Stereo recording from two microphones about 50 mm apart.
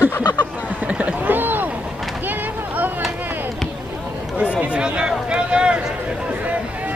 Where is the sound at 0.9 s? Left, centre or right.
Right.